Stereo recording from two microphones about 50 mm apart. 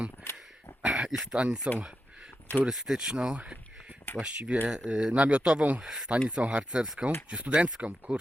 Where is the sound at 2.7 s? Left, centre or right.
Centre.